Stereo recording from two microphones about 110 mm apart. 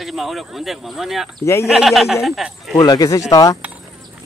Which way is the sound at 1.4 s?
25° left (ahead or behind).